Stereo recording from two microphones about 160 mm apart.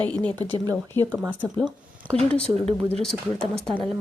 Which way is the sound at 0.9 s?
15° left (ahead or behind).